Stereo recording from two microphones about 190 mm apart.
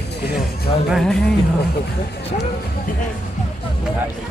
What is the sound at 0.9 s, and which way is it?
Speech, 5° left (ahead or behind).